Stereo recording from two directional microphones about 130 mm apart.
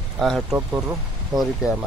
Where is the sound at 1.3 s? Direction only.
30° right (ahead or behind).